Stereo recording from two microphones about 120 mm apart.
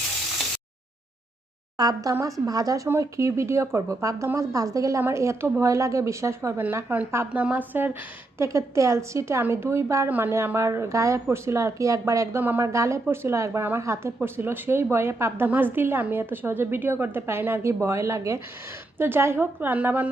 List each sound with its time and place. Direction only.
1.8 s a woman's voice: 30° right (ahead or behind); by 20.1 s 15° right (ahead or behind)